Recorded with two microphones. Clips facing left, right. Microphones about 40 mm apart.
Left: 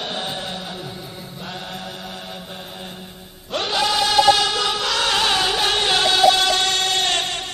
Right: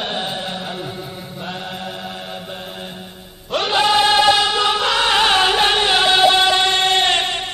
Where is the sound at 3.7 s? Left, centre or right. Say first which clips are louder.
Right 4 dB; right.